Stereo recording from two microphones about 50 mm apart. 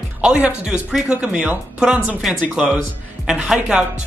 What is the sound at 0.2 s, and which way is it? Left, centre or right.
Speech, centre.